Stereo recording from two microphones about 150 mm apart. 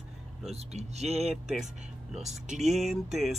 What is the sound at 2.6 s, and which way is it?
Speech, centre (ahead or behind).